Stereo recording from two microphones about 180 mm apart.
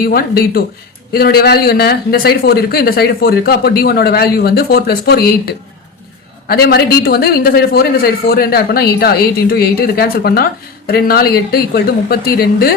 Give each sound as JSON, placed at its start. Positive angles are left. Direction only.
{"t": 0.0, "sound": "a man's voice", "side_deg": 55}